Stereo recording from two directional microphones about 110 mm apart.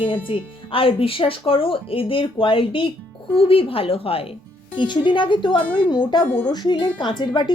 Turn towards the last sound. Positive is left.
turn(degrees=40)  # may be behind; listen again after turning